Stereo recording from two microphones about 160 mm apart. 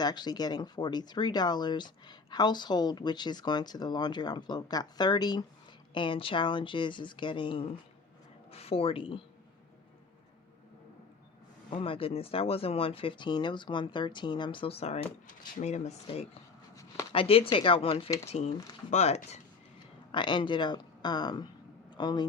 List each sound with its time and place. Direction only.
0.0 s speech: 25° left (ahead or behind)
11.7 s speech: 35° left (ahead or behind)
20.1 s a man's voice: 30° left (ahead or behind)